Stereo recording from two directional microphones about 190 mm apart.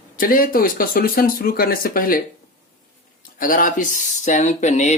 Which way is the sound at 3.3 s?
45° left (ahead or behind).